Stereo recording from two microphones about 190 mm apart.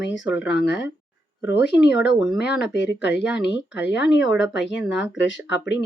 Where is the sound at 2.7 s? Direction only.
65° left (ahead or behind).